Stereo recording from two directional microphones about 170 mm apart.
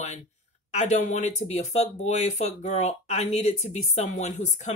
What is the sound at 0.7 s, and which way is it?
Speech, 45° left (ahead or behind).